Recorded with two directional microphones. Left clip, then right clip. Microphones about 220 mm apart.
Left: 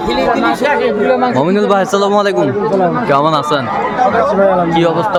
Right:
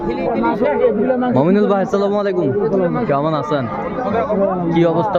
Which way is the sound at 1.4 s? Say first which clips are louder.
Left 3 dB; 10° left (ahead or behind).